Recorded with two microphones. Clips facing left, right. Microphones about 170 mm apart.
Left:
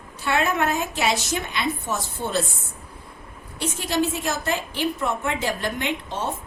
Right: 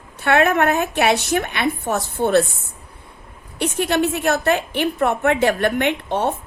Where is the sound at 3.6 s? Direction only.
60° right (ahead or behind).